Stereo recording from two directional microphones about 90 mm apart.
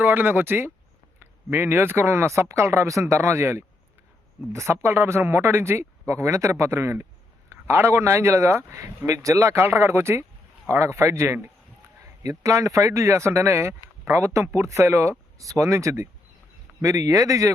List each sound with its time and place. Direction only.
0.0 s speech: 20° right (ahead or behind); by 17.5 s 35° right (ahead or behind)